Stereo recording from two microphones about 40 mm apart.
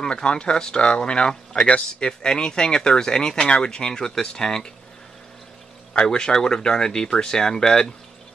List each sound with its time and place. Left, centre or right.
0.0 s speech: left
5.9 s speech: centre